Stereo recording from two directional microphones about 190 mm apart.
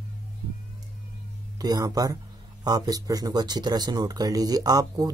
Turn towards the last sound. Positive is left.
turn(degrees=-20)  # may be behind; listen again after turning